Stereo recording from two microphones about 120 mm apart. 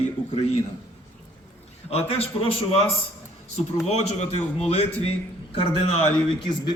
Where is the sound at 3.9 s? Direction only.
65° left (ahead or behind).